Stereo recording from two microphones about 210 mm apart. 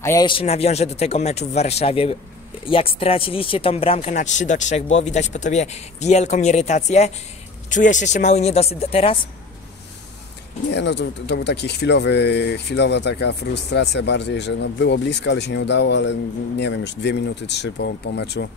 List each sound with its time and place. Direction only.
0.0 s a man's voice: 15° left (ahead or behind)
10.7 s speech: 55° left (ahead or behind)